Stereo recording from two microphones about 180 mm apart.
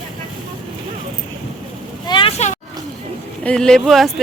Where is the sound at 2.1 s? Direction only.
30° left (ahead or behind).